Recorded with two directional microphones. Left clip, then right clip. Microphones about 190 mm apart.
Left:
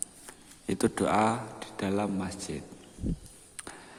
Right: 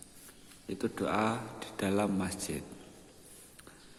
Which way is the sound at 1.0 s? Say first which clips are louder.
Left 4 dB; 15° left (ahead or behind).